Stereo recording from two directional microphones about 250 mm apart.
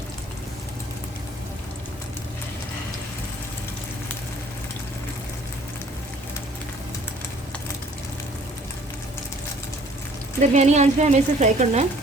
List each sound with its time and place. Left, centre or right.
10.4 s speech: right